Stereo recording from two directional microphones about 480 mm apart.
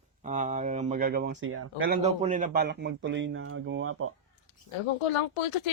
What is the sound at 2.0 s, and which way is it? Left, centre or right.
A man's voice, centre.